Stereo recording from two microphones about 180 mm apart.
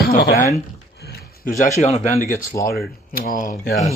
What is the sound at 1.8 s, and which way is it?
Speech, 35° left (ahead or behind).